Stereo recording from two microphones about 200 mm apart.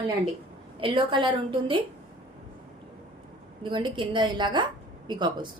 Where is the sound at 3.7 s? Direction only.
25° right (ahead or behind).